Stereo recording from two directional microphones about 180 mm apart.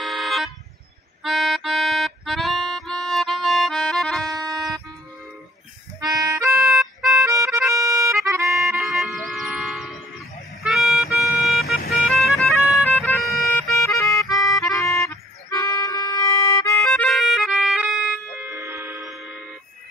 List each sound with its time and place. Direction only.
0.0 s car alarm: centre (ahead or behind)
1.2 s music: centre (ahead or behind)
4.3 s music: 20° right (ahead or behind)
6.0 s harmonica: 20° right (ahead or behind)
6.6 s music: centre (ahead or behind)
7.2 s music: 15° right (ahead or behind)
8.9 s music: centre (ahead or behind)
12.9 s bagpipes: 5° left (ahead or behind)
13.8 s music: 15° left (ahead or behind)
14.3 s music: centre (ahead or behind)
14.6 s music: 15° left (ahead or behind)
16.9 s music: 5° left (ahead or behind)
18.5 s music: 15° right (ahead or behind)
19.0 s music: centre (ahead or behind)